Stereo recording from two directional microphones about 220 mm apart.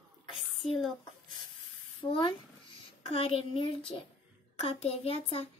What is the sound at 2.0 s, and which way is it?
A child's voice, 25° left (ahead or behind).